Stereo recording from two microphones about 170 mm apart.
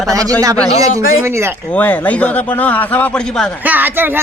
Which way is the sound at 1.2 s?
15° right (ahead or behind).